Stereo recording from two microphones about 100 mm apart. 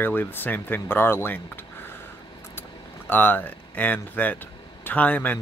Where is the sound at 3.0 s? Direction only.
20° left (ahead or behind).